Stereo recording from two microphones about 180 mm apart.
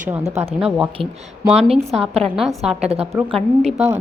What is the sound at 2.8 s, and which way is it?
Speech, 35° right (ahead or behind).